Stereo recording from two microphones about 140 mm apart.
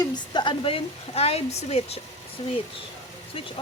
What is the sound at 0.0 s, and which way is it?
Speech, 35° left (ahead or behind).